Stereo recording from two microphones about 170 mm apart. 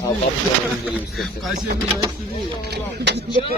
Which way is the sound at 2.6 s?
85° right.